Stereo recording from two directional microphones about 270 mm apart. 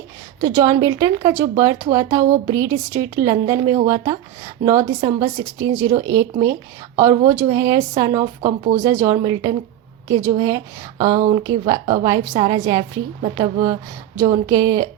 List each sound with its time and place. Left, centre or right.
0.4 s speech: centre
8.4 s speech: right
8.7 s speech: centre